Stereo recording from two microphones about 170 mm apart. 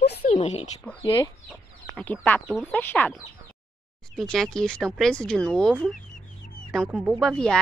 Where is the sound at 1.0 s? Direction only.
25° left (ahead or behind).